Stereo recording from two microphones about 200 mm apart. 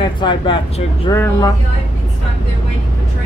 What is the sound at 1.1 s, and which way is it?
Speech, 15° left (ahead or behind).